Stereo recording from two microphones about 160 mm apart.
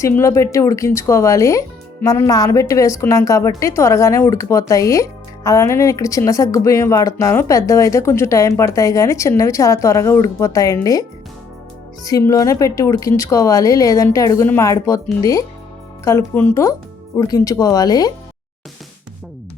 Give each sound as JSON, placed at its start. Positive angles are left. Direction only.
{"t": 0.0, "sound": "speech", "side_deg": 20}
{"t": 12.0, "sound": "speech", "side_deg": 20}